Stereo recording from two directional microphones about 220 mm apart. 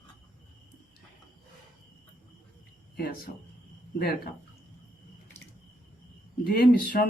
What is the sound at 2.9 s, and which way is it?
Speech, 45° left (ahead or behind).